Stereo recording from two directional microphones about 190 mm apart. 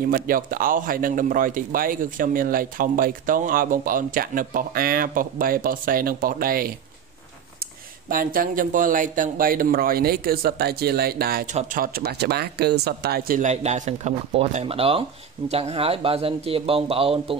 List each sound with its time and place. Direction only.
0.1 s a man's voice: 50° right (ahead or behind)
8.1 s a man's voice: 45° right (ahead or behind)
13.4 s speech: 35° right (ahead or behind)